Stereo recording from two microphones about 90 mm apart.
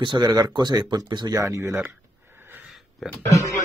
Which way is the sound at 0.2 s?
40° right (ahead or behind).